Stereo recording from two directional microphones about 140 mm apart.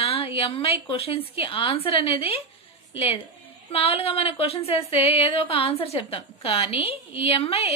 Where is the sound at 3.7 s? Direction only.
45° left (ahead or behind).